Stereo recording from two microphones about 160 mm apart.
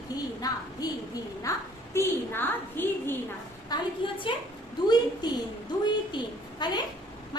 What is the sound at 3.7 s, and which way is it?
Speech, 25° left (ahead or behind).